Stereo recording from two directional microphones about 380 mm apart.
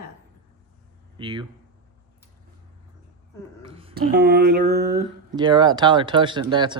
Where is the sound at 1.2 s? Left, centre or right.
Centre.